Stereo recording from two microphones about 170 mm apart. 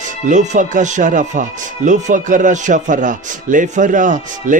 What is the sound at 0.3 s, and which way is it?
Speech, 45° right (ahead or behind).